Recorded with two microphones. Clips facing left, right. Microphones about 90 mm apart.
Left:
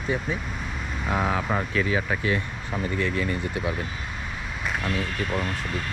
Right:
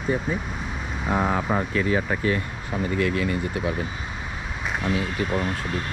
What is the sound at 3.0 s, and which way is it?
Speech, 60° right (ahead or behind).